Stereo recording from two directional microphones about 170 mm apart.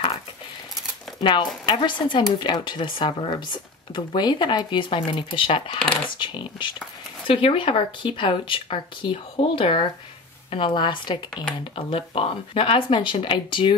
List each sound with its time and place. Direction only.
1.2 s speech: 30° left (ahead or behind)